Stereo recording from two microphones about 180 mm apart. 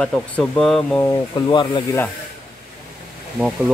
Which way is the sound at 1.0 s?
20° left (ahead or behind).